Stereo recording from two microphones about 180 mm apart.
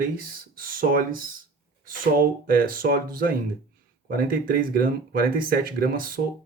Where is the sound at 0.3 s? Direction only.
55° right (ahead or behind).